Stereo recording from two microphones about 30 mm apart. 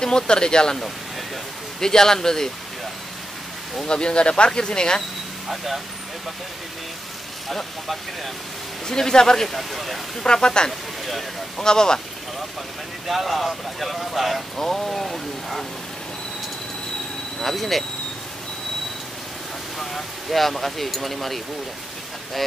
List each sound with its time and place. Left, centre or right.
0.0 s speech: left
1.8 s speech: centre
3.8 s speech: left
7.4 s speech: centre
8.8 s speech: left
9.5 s speech: centre
10.2 s speech: left
13.0 s speech: centre
14.6 s speech: centre
17.4 s speech: centre
19.8 s speech: centre